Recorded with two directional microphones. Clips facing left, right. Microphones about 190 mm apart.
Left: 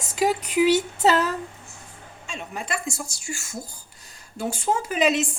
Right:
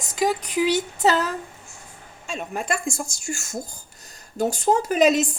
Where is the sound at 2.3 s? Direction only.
45° right (ahead or behind).